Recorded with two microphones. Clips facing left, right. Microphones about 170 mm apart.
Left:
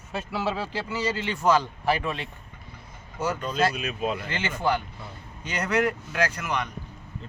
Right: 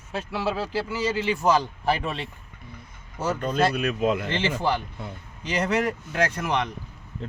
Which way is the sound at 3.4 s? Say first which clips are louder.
Right 4 dB; 50° right (ahead or behind).